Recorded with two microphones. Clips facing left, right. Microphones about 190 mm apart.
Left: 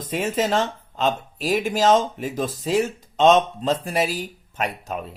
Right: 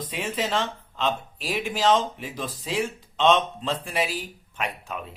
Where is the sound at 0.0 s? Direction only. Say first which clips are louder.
Left 6 dB; 45° left (ahead or behind).